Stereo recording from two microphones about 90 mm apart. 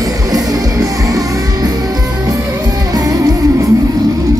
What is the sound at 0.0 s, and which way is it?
Music, 45° right (ahead or behind).